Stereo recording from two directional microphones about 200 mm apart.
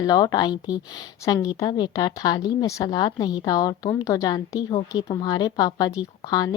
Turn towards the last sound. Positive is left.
turn(degrees=20)  # may be behind; listen again after turning